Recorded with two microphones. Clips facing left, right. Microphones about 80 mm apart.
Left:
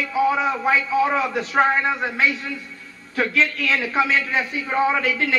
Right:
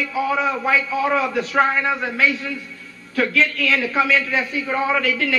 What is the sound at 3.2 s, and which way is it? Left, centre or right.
A man's voice, left.